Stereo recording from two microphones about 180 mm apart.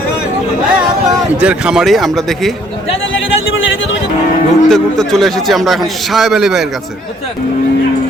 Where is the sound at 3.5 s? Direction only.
90° left.